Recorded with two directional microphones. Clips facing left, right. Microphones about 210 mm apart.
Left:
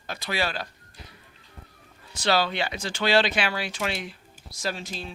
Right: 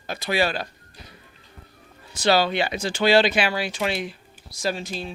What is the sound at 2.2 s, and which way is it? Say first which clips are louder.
Speech: right 4 dB; 10° right (ahead or behind).